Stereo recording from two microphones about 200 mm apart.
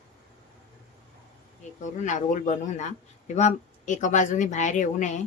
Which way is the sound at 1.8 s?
35° left (ahead or behind).